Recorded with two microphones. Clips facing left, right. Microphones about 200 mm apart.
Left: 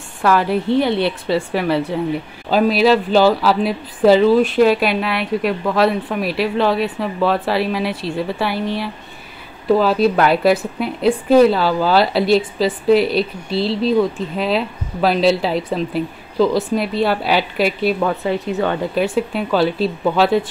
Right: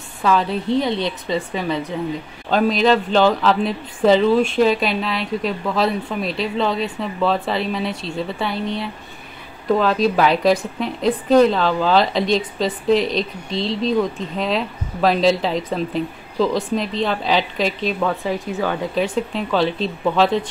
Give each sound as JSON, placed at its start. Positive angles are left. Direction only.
{"t": 0.9, "sound": "a woman's voice", "side_deg": 65}
{"t": 2.5, "sound": "a woman's voice", "side_deg": 5}
{"t": 9.7, "sound": "a woman's voice", "side_deg": 5}